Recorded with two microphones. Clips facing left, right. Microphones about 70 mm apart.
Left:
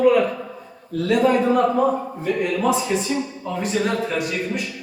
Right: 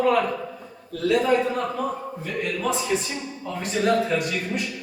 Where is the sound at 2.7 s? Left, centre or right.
Centre.